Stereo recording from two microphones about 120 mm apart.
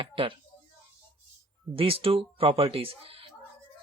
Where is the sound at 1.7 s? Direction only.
50° right (ahead or behind).